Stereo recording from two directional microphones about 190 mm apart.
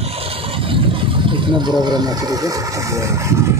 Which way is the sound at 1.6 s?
20° right (ahead or behind).